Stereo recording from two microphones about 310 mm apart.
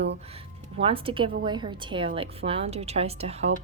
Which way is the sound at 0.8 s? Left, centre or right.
Centre.